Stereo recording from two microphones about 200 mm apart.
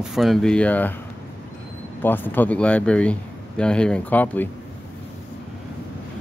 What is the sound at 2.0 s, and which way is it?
Speech, 10° left (ahead or behind).